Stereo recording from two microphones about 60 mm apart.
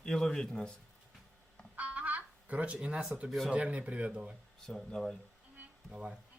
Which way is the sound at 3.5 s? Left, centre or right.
Right.